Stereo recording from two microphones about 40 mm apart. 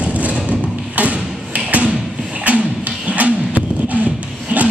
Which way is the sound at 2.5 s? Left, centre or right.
Right.